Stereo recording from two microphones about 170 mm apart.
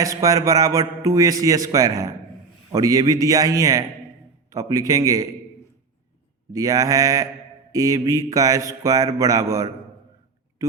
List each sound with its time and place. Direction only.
0.0 s a man's voice: 20° right (ahead or behind)
6.5 s a man's voice: 20° right (ahead or behind)
10.6 s a sound: 20° right (ahead or behind)